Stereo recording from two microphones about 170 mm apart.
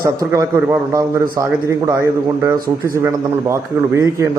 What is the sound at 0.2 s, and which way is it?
A man's voice, 15° right (ahead or behind).